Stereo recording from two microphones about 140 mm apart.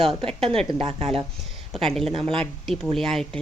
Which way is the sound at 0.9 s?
45° right (ahead or behind).